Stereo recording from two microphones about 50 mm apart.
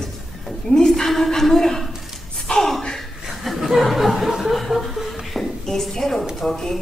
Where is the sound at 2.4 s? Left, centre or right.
Centre.